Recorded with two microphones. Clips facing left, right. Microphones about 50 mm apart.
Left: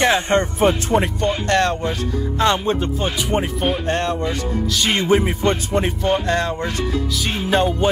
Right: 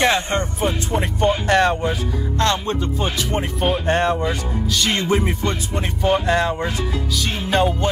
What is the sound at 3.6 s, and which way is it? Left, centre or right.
Speech, centre.